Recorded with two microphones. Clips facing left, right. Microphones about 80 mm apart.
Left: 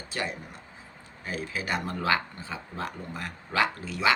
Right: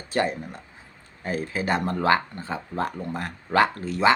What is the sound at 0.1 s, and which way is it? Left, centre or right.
Speech, right.